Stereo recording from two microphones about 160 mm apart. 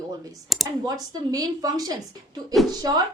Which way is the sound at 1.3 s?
25° right (ahead or behind).